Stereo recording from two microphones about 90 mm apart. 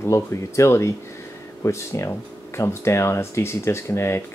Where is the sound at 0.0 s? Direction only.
30° left (ahead or behind).